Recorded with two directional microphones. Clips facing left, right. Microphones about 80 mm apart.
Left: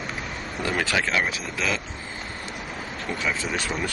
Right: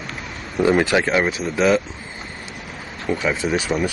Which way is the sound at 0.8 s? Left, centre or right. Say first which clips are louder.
Right 7 dB; centre.